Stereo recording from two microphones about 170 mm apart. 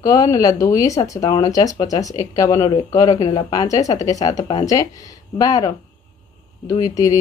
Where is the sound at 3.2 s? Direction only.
30° left (ahead or behind).